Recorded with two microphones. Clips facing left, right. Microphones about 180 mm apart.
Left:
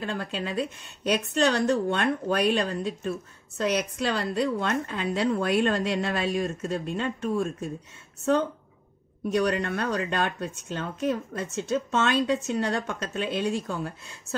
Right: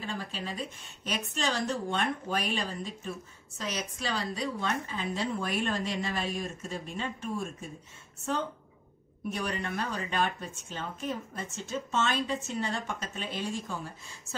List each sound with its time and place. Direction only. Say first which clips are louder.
0.0 s a woman's voice: left 6 dB; 65° left (ahead or behind)
9.3 s a woman's voice: left 9 dB; 70° left (ahead or behind)